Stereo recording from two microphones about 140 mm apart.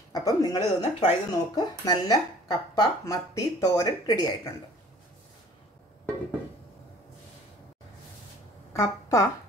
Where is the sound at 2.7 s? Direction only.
20° left (ahead or behind).